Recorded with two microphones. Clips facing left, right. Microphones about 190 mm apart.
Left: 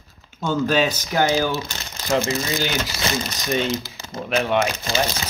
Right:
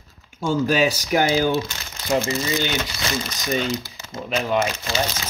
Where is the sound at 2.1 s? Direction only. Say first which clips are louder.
Even; centre (ahead or behind).